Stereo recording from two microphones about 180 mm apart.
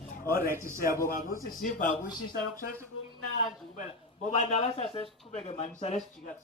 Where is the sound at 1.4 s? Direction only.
50° left (ahead or behind).